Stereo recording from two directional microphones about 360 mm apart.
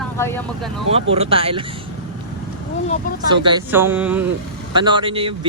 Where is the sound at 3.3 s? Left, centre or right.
Centre.